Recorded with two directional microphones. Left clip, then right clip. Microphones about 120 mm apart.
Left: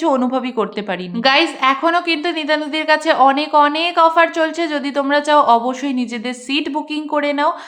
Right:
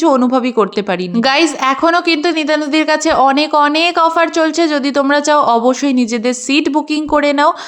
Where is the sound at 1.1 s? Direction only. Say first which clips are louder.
Right 1 dB; 90° right.